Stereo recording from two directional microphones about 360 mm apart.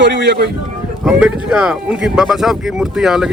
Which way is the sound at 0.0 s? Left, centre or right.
Right.